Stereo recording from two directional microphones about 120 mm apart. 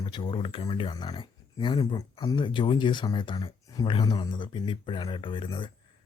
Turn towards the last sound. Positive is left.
turn(degrees=45)  # may be behind; listen again after turning